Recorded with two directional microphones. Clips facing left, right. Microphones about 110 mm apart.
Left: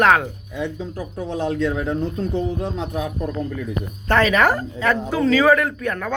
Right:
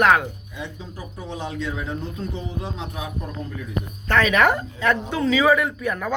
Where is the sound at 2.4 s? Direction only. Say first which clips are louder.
Left 7 dB; 50° left (ahead or behind).